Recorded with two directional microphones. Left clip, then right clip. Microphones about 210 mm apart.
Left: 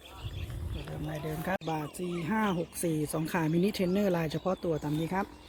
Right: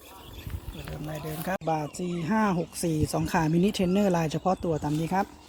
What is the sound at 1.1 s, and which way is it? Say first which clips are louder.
Speech: right 2 dB; 10° left (ahead or behind).